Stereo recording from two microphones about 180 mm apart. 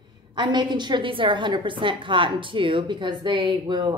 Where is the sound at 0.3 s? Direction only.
25° right (ahead or behind).